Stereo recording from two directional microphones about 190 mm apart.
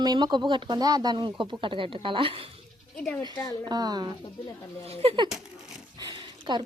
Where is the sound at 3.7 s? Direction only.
20° right (ahead or behind).